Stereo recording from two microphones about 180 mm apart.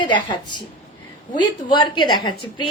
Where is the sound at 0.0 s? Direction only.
25° left (ahead or behind).